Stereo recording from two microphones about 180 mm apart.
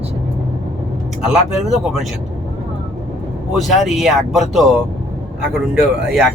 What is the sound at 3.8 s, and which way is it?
Speech, centre (ahead or behind).